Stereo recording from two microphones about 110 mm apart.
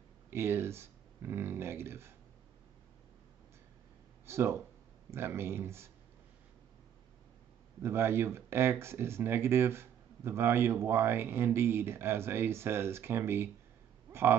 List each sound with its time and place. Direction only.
0.3 s speech: 20° right (ahead or behind)
4.3 s speech: 25° right (ahead or behind)
7.8 s speech: 20° right (ahead or behind)